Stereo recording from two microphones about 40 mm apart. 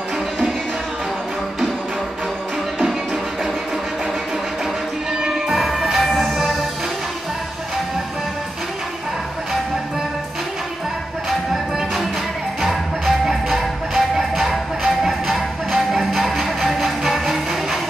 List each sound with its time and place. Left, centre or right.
5.2 s music: centre
5.6 s music: centre
12.6 s music: centre